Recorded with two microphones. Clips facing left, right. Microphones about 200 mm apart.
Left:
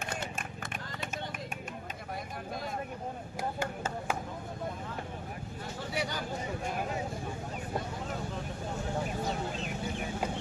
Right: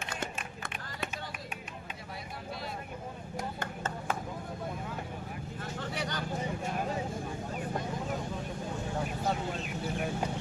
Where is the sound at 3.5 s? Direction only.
10° left (ahead or behind).